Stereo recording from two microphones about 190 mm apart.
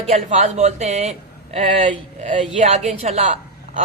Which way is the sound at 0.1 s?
35° right (ahead or behind).